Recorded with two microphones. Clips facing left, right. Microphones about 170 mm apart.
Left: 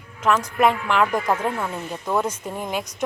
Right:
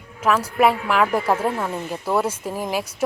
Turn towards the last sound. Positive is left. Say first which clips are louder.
# right 3 dB
turn(degrees=-5)  # may be behind; listen again after turning